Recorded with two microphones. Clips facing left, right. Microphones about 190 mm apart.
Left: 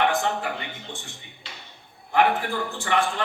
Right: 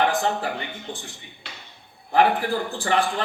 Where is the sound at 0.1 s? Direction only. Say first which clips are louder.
Right 1 dB; 35° right (ahead or behind).